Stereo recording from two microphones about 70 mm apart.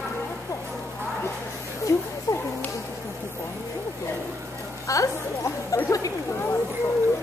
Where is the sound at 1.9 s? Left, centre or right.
Left.